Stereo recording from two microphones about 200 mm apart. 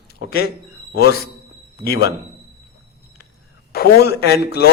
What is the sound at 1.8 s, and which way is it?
Speech, 50° left (ahead or behind).